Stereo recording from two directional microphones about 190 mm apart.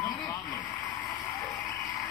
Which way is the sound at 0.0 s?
20° left (ahead or behind).